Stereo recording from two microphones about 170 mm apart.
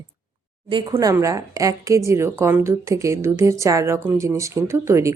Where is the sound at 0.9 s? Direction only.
15° right (ahead or behind).